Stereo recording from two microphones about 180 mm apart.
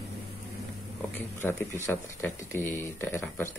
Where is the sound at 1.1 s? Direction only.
15° left (ahead or behind).